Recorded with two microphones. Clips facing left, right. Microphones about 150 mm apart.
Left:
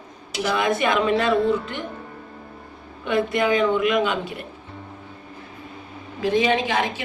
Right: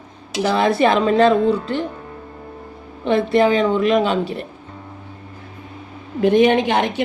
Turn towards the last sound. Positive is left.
turn(degrees=-65)  # may be behind; listen again after turning